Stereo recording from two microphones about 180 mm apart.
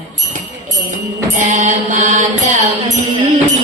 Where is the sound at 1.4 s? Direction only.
45° right (ahead or behind).